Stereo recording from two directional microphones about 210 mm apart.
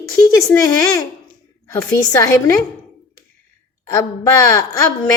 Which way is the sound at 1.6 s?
15° left (ahead or behind).